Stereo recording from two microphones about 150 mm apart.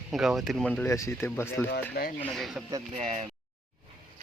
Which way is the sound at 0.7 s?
10° left (ahead or behind).